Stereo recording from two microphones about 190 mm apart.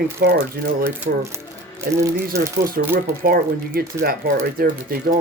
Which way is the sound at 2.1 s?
50° right (ahead or behind).